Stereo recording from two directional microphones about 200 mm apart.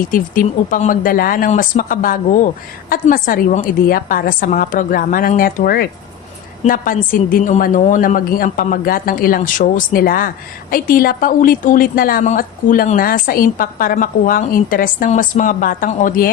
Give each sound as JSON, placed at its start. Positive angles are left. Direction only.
{"t": 0.1, "sound": "a woman's voice", "side_deg": 40}